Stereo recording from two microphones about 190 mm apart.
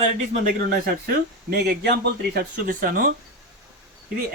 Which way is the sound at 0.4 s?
50° right (ahead or behind).